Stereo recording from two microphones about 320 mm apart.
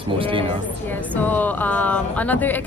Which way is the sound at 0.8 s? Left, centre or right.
Centre.